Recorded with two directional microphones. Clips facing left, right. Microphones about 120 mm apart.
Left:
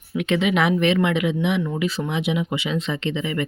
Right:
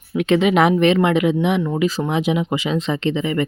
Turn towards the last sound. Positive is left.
turn(degrees=-40)  # may be behind; listen again after turning